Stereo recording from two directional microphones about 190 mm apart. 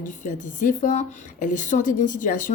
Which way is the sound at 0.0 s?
40° left (ahead or behind).